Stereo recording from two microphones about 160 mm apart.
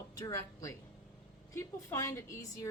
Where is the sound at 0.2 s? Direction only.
20° left (ahead or behind).